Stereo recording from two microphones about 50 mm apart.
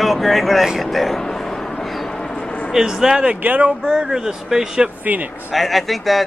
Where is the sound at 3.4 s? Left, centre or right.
Right.